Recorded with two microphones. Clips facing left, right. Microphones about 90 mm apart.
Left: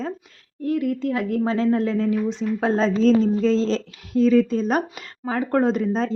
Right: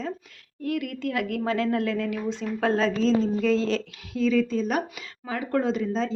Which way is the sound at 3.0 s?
45° left (ahead or behind).